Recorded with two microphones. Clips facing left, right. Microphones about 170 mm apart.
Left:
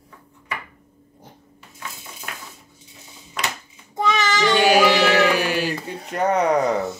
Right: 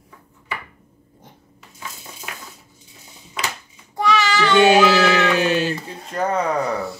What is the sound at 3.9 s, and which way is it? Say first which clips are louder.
Child singing: right 2 dB; 20° left (ahead or behind).